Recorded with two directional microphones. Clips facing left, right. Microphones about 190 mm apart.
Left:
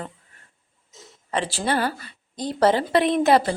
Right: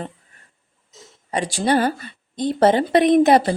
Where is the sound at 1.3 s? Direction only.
15° right (ahead or behind).